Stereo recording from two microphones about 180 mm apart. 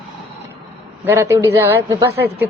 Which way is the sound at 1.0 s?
15° right (ahead or behind).